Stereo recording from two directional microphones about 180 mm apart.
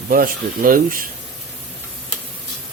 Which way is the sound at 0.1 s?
50° right (ahead or behind).